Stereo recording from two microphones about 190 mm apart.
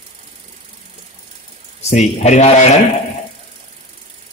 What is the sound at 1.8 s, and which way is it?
Speech, 35° left (ahead or behind).